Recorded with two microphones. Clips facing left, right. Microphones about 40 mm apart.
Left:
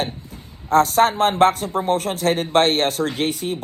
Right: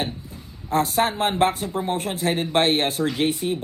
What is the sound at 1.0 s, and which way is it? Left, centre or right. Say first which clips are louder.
Speech: left 4 dB; centre.